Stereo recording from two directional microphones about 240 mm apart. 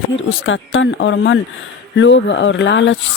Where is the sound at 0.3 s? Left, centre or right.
Left.